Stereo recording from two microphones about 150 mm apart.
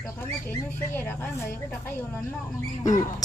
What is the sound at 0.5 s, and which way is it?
Speech, 15° left (ahead or behind).